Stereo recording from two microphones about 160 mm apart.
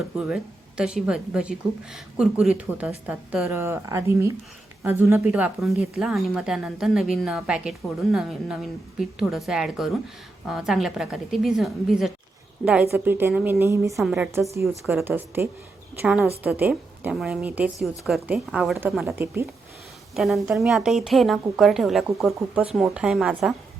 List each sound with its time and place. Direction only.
0.2 s a woman's voice: 5° right (ahead or behind)
12.9 s a woman's voice: 15° right (ahead or behind)
19.0 s a woman's voice: 15° right (ahead or behind)
20.1 s a woman's voice: centre (ahead or behind)